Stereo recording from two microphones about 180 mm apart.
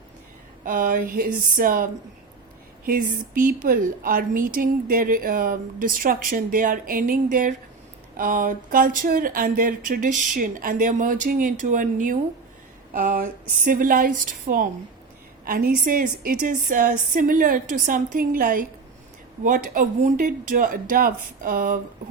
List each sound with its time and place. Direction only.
0.6 s a woman's voice: 50° right (ahead or behind)